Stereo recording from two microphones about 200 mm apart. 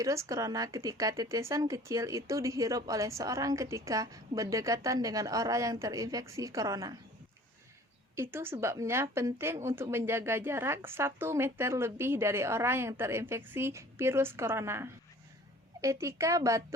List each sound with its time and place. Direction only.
0.0 s speech: 15° right (ahead or behind)
8.1 s speech: 10° right (ahead or behind)